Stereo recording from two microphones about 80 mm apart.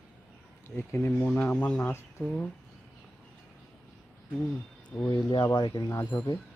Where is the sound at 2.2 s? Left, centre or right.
Left.